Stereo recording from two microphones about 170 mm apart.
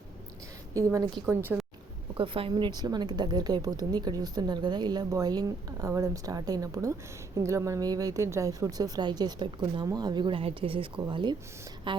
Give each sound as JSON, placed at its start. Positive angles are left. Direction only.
{"t": 0.7, "sound": "a woman's voice", "side_deg": -20}
{"t": 2.1, "sound": "a woman's voice", "side_deg": -30}